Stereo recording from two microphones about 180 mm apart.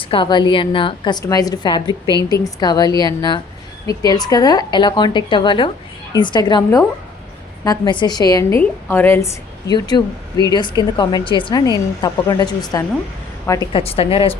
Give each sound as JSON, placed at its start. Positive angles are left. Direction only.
{"t": 0.0, "sound": "a woman's voice", "side_deg": 30}
{"t": 13.7, "sound": "a woman's voice", "side_deg": 30}